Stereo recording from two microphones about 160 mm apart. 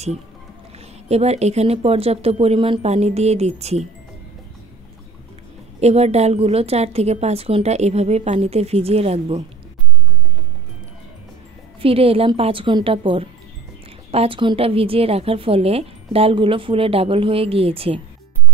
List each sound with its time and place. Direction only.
1.0 s a woman's voice: 40° right (ahead or behind)
5.8 s a woman's voice: 40° right (ahead or behind)
11.8 s a woman's voice: 35° right (ahead or behind)